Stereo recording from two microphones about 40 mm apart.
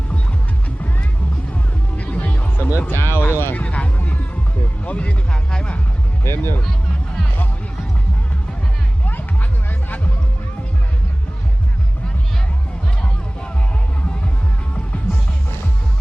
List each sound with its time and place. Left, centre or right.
2.0 s music: left
2.9 s a sound: left
3.5 s vehicle: left
4.8 s speech: left
5.5 s music: centre
6.2 s speech: left
9.0 s music: left